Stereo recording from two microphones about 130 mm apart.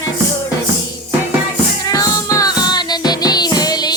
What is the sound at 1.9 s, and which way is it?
Music, 30° left (ahead or behind).